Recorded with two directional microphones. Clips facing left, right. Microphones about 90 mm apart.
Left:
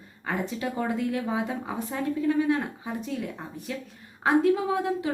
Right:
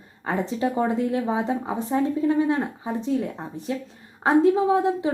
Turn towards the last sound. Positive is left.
turn(degrees=-25)  # may be behind; listen again after turning